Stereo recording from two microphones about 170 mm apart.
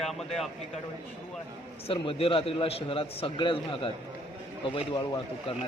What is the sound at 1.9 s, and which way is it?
A man's voice, 35° left (ahead or behind).